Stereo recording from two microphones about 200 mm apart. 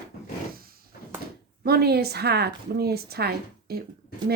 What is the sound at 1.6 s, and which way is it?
A woman's voice, 50° right (ahead or behind).